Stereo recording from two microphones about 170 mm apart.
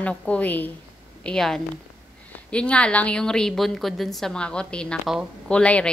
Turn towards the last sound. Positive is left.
turn(degrees=5)  # may be behind; listen again after turning